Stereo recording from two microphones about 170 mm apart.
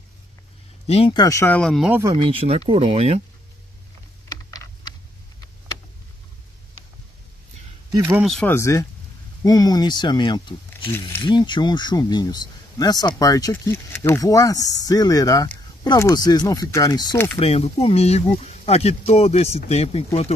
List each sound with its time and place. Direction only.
0.8 s speech: 35° left (ahead or behind)
1.2 s speech: 15° left (ahead or behind)
1.9 s speech: 15° right (ahead or behind)
2.1 s speech: 30° right (ahead or behind)
4.3 s computer keyboard: 20° left (ahead or behind)
7.9 s speech: 10° right (ahead or behind)
8.3 s speech: centre (ahead or behind)
8.5 s speech: 15° left (ahead or behind)
10.9 s speech: 15° left (ahead or behind)
11.2 s speech: 25° left (ahead or behind)
17.4 s speech: 35° left (ahead or behind)